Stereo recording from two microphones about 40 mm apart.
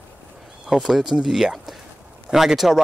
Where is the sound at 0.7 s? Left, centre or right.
Centre.